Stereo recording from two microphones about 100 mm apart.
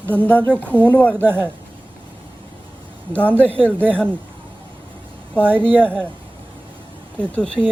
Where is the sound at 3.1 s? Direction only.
20° right (ahead or behind).